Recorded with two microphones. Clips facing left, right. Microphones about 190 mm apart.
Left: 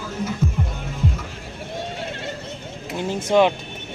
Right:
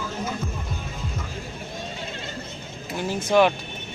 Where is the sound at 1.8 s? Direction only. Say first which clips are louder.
Left 7 dB; 70° left (ahead or behind).